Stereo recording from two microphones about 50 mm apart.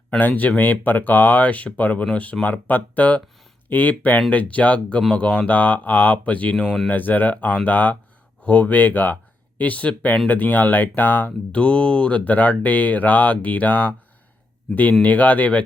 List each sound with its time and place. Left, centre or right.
0.2 s speech: left
11.3 s speech: left
15.0 s speech: left